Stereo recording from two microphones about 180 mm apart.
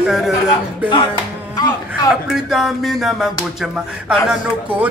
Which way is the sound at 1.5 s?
20° left (ahead or behind).